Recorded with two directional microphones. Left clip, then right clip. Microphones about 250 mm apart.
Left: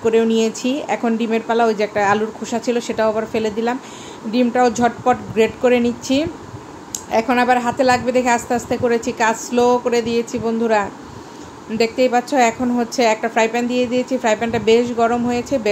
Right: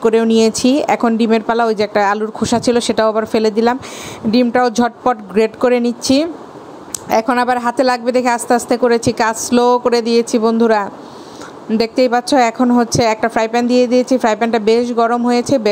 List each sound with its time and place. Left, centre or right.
0.0 s a woman's voice: right